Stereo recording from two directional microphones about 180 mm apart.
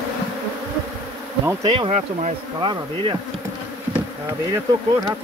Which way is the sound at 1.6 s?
30° right (ahead or behind).